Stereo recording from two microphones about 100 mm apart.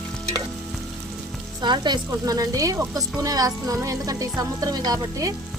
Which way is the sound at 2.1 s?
35° right (ahead or behind).